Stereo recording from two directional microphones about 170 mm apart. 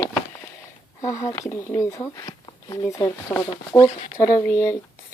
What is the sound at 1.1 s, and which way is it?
Speech, 20° left (ahead or behind).